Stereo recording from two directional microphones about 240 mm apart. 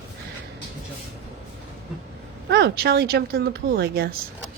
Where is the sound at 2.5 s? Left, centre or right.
Right.